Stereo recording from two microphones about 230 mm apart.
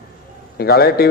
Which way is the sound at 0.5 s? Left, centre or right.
Left.